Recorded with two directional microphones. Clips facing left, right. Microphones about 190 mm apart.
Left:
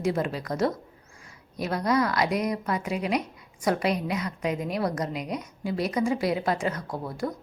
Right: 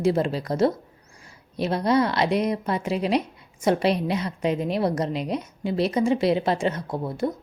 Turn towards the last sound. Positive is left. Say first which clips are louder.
# right 5 dB
turn(degrees=-25)  # may be behind; listen again after turning